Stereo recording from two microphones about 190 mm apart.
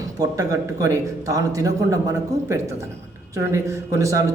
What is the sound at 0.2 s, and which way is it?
A man's voice, 20° right (ahead or behind).